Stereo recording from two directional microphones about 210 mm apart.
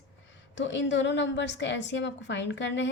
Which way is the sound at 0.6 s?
60° left (ahead or behind).